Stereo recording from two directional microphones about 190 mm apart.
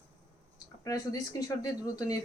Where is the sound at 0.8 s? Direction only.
20° left (ahead or behind).